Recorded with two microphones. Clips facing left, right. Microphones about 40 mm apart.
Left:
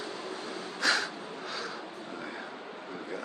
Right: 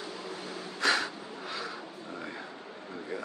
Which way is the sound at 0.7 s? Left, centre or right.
Centre.